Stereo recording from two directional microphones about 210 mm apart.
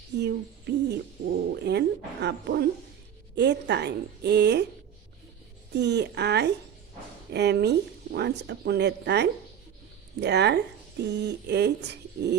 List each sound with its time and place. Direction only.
0.1 s speech: 55° right (ahead or behind)
5.7 s speech: 55° right (ahead or behind)